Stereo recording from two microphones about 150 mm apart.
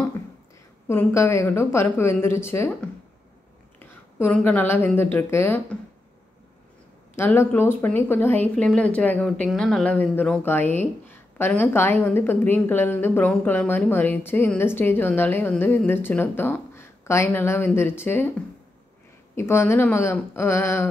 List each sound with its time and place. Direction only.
0.8 s speech: 15° left (ahead or behind)
3.8 s speech: 10° left (ahead or behind)
7.2 s speech: 15° left (ahead or behind)
19.3 s speech: 15° left (ahead or behind)